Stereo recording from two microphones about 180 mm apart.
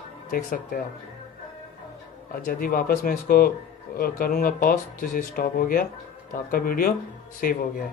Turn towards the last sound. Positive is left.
turn(degrees=50)  # may be behind; listen again after turning